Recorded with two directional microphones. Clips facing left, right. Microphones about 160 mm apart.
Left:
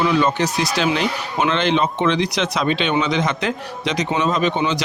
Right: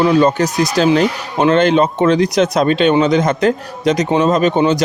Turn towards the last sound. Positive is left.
turn(degrees=-45)  # may be behind; listen again after turning